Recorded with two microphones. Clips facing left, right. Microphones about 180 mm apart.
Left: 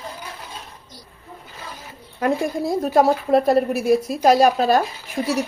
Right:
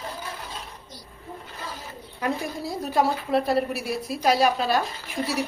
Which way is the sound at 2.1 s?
50° left (ahead or behind).